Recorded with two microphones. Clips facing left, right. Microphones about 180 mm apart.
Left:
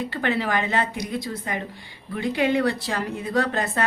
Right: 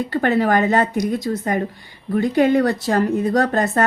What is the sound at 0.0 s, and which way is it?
A woman's voice, 45° right (ahead or behind).